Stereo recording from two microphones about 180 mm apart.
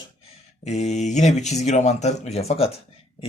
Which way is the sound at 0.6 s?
35° left (ahead or behind).